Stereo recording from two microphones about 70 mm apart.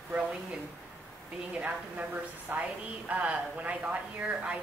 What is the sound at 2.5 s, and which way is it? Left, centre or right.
Speech, right.